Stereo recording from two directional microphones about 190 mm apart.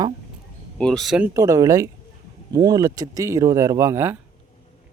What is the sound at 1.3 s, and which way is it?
Speech, 15° right (ahead or behind).